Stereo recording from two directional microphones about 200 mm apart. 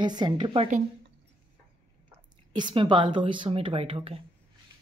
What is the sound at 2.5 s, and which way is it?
A woman's voice, 20° right (ahead or behind).